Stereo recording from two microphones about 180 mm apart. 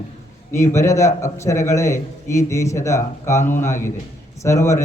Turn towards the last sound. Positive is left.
turn(degrees=15)  # may be behind; listen again after turning